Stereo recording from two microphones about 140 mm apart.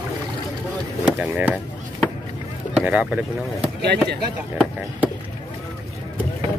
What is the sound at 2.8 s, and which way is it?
Boat, 10° right (ahead or behind).